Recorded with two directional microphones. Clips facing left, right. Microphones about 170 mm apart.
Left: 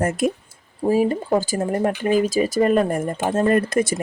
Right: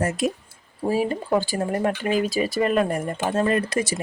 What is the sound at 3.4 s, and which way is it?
Speech, 50° left (ahead or behind).